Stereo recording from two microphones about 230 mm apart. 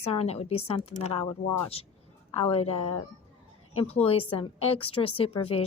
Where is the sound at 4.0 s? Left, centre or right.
Left.